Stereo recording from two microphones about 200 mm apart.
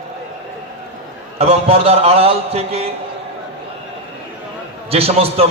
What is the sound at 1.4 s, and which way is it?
A man's voice, 30° right (ahead or behind).